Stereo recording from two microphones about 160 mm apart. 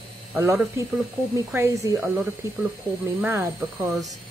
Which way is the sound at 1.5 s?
20° right (ahead or behind).